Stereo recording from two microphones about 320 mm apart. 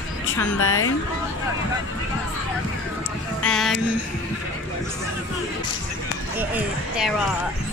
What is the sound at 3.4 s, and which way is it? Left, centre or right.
Speech, centre.